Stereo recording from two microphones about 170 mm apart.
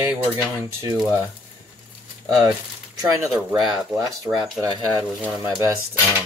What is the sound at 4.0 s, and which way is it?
Speech, 15° right (ahead or behind).